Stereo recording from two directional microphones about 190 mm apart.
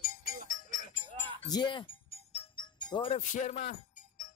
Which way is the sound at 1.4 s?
25° left (ahead or behind).